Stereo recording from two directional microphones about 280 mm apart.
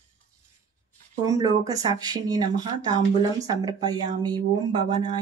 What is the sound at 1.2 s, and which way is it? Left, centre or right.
Speech, centre.